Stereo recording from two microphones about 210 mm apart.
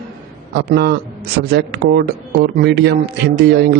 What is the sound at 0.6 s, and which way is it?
A man's voice, 50° right (ahead or behind).